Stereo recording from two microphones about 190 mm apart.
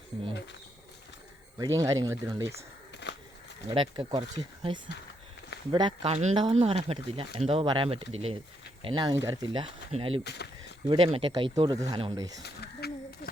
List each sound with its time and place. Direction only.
1.5 s speech: 15° right (ahead or behind)
3.0 s a sound: 65° left (ahead or behind)
3.7 s speech: 25° right (ahead or behind)
10.2 s speech: 60° left (ahead or behind)
10.8 s speech: 30° right (ahead or behind)
12.4 s a sound: 60° left (ahead or behind)